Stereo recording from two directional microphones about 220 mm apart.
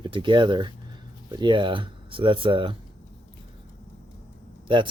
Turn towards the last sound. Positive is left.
turn(degrees=-20)  # may be behind; listen again after turning